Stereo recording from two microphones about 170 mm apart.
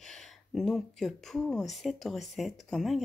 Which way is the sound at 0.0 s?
Centre (ahead or behind).